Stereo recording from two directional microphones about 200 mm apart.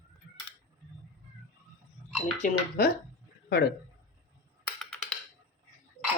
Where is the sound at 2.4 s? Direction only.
35° left (ahead or behind).